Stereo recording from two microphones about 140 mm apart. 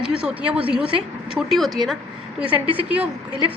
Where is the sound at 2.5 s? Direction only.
10° right (ahead or behind).